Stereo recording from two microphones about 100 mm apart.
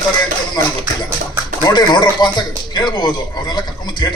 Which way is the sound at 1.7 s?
50° left (ahead or behind).